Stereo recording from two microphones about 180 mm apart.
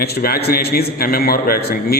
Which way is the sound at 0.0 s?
60° left (ahead or behind).